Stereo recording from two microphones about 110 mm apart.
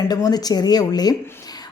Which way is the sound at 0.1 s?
35° left (ahead or behind).